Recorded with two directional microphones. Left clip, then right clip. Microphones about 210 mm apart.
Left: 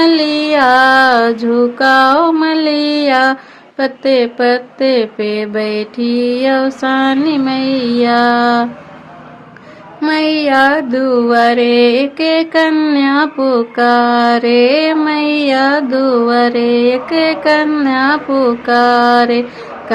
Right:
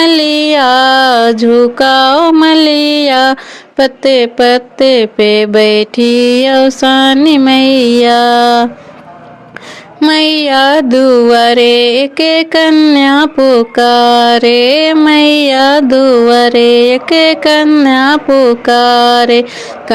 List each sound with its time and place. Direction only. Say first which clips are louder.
0.0 s mantra: right 3 dB; 40° right (ahead or behind)
3.8 s music: right 4 dB; 35° right (ahead or behind)
10.0 s music: right 5 dB; 45° right (ahead or behind)